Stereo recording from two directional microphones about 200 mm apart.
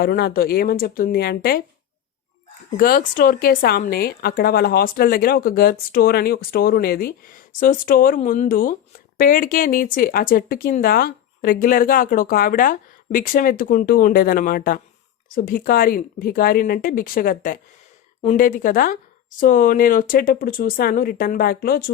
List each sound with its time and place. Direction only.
0.0 s speech: 50° left (ahead or behind)
2.7 s speech: 45° left (ahead or behind)
18.2 s a woman's voice: 30° left (ahead or behind)
18.4 s speech: 45° left (ahead or behind)